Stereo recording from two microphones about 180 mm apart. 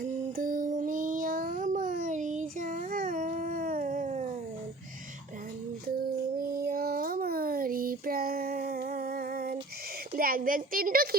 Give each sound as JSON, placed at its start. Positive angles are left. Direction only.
{"t": 0.3, "sound": "child singing", "side_deg": -50}
{"t": 6.7, "sound": "child singing", "side_deg": -55}
{"t": 10.2, "sound": "a woman's voice", "side_deg": -50}